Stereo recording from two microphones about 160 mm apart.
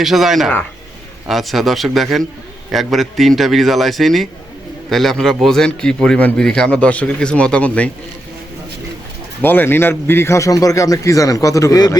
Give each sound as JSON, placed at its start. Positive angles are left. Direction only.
{"t": 0.0, "sound": "a man's voice", "side_deg": 0}
{"t": 9.4, "sound": "a man's voice", "side_deg": 10}